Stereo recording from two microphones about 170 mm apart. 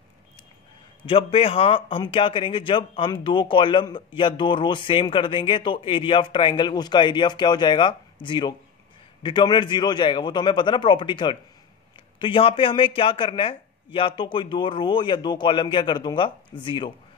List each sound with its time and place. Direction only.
1.0 s speech: 35° left (ahead or behind)